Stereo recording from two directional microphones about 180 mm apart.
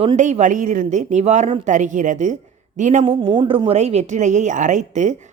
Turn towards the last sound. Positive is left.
turn(degrees=-40)  # may be behind; listen again after turning